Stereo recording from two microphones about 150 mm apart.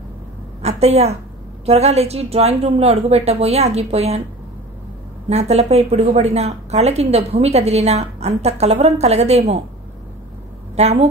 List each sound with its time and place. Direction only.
0.6 s a woman's voice: 45° right (ahead or behind)
5.3 s a woman's voice: 45° right (ahead or behind)
10.8 s a woman's voice: 45° right (ahead or behind)